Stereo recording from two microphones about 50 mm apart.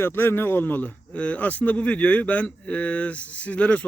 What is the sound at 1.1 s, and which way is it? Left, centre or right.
Speech, left.